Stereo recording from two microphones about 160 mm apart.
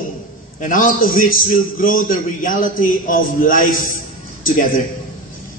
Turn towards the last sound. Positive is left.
turn(degrees=55)  # may be behind; listen again after turning